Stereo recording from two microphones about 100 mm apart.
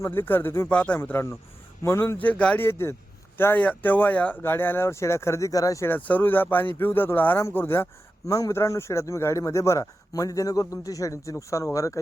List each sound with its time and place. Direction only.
0.0 s speech: 25° left (ahead or behind)
2.6 s speech: 25° left (ahead or behind)
5.8 s speech: 15° left (ahead or behind); by 11.9 s 35° left (ahead or behind)